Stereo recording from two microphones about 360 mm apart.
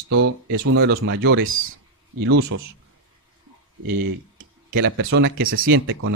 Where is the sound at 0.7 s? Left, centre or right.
Right.